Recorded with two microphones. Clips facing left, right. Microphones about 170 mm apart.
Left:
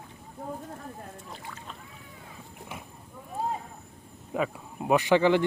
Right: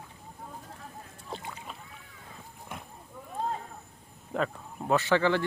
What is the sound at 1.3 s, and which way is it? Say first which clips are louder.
Boat: right 3 dB; 20° right (ahead or behind).